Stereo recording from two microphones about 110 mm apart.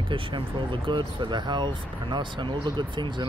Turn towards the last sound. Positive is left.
turn(degrees=-45)  # may be behind; listen again after turning